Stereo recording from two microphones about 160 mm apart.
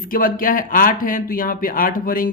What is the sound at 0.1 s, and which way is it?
Speech, 60° left (ahead or behind).